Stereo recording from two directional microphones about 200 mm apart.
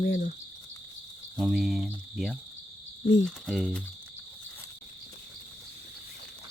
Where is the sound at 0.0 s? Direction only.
50° left (ahead or behind).